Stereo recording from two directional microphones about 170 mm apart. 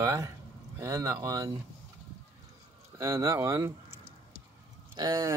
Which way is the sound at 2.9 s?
15° right (ahead or behind).